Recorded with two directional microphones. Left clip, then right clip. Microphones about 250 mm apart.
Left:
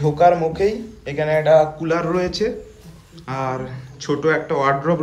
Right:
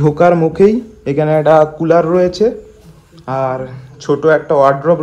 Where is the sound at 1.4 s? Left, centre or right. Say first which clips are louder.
Right 4 dB; right.